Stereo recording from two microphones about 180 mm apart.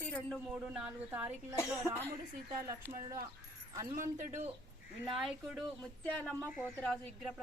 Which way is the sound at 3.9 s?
45° right (ahead or behind).